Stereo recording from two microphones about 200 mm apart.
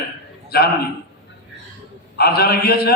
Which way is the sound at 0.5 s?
50° left (ahead or behind).